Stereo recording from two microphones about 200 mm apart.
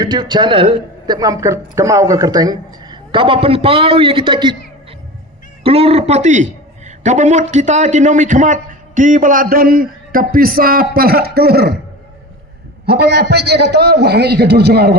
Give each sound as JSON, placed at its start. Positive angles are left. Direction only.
{"t": 0.0, "sound": "a man's voice", "side_deg": -20}
{"t": 5.6, "sound": "a man's voice", "side_deg": -30}
{"t": 12.8, "sound": "a man's voice", "side_deg": -55}